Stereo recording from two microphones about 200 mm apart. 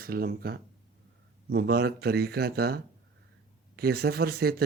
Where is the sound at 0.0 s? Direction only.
50° right (ahead or behind).